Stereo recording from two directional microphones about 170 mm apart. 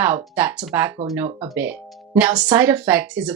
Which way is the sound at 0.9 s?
20° right (ahead or behind).